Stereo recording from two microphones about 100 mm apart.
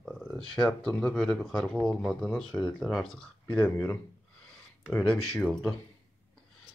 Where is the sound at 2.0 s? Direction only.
Centre (ahead or behind).